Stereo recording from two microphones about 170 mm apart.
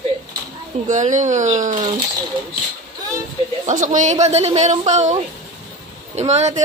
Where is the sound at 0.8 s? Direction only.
45° right (ahead or behind).